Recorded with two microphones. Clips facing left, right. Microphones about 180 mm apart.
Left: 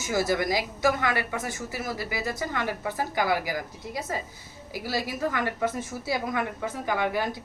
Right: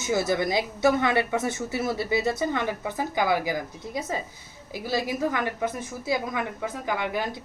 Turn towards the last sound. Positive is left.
turn(degrees=-15)  # may be behind; listen again after turning